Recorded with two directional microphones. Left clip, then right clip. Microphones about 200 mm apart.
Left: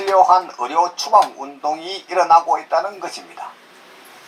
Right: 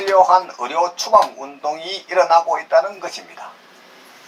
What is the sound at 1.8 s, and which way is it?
Speech, 15° left (ahead or behind).